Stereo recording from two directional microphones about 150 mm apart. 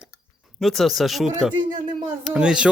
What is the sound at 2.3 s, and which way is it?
Speech, 5° right (ahead or behind).